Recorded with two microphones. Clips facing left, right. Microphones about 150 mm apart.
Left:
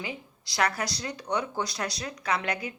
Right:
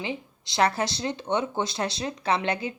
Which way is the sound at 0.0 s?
25° right (ahead or behind).